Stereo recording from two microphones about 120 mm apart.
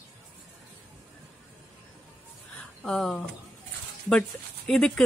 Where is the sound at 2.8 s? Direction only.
5° left (ahead or behind).